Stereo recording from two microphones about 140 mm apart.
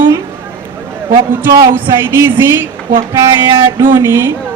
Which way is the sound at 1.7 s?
15° right (ahead or behind).